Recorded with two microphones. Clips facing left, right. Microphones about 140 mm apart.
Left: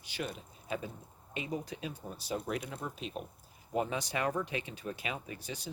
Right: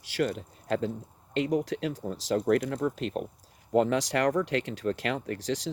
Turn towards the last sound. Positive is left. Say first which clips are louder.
# right 11 dB
turn(degrees=-90)